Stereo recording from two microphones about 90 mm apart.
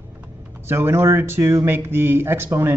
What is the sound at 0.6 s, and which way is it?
Speech, 25° right (ahead or behind).